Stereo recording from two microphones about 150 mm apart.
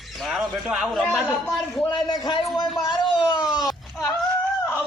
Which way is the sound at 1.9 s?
30° left (ahead or behind).